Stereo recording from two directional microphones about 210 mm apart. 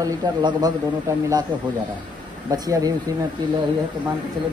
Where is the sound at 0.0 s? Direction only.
20° right (ahead or behind).